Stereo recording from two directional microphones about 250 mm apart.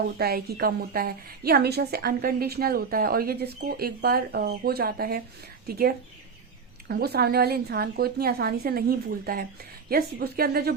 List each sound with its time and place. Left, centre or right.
0.2 s a woman's voice: right